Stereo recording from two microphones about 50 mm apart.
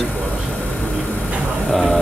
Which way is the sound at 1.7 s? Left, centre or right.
Centre.